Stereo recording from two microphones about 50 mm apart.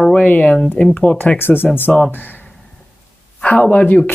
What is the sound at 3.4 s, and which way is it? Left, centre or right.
Speech, left.